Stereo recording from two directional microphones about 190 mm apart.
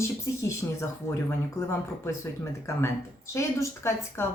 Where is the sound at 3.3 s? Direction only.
15° left (ahead or behind).